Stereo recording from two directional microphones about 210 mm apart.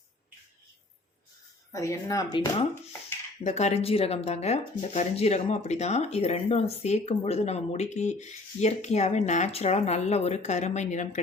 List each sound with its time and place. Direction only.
1.7 s speech: 15° left (ahead or behind)
3.4 s speech: 30° left (ahead or behind)